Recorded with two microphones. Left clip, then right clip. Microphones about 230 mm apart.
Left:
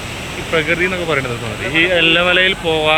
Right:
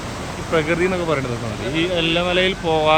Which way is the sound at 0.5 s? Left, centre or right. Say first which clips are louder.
Left 3 dB; centre.